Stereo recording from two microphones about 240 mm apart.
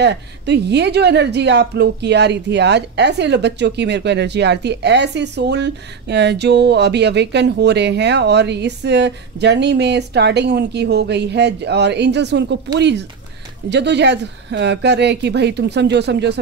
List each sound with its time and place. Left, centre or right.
0.0 s a woman's voice: right